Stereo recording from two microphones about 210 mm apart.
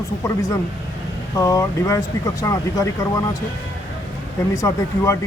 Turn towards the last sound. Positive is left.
turn(degrees=15)  # may be behind; listen again after turning